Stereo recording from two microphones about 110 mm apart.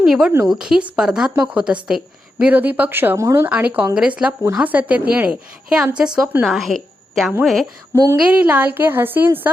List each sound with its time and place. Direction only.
0.0 s a woman's voice: 5° right (ahead or behind); by 3.5 s 25° right (ahead or behind)
3.5 s a woman's voice: 15° right (ahead or behind)
6.5 s a woman's voice: centre (ahead or behind)
8.1 s a woman's voice: 10° right (ahead or behind)